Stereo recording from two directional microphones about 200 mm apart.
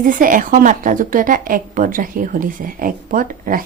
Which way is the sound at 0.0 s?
40° right (ahead or behind).